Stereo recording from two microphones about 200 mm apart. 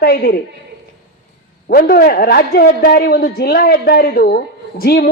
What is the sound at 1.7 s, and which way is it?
A man's voice, 50° left (ahead or behind).